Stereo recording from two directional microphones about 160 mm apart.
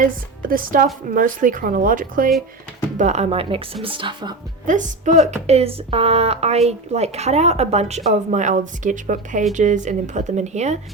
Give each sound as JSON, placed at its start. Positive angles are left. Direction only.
{"t": 0.0, "sound": "a woman's voice", "side_deg": -60}
{"t": 3.0, "sound": "speech", "side_deg": -45}
{"t": 4.6, "sound": "speech", "side_deg": -50}